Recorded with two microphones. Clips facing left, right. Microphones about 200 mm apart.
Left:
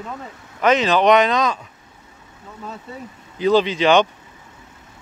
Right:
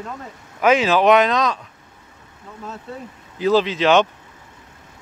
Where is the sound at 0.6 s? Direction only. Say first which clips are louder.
Even; 5° right (ahead or behind).